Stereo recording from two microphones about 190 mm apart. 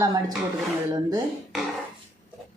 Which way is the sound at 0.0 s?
20° right (ahead or behind).